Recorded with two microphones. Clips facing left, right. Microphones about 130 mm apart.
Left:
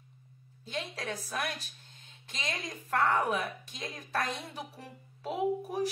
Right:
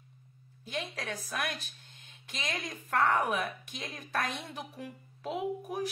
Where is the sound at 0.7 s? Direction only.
30° left (ahead or behind).